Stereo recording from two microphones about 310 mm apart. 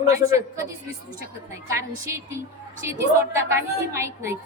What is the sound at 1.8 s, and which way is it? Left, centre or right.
A woman's voice, centre.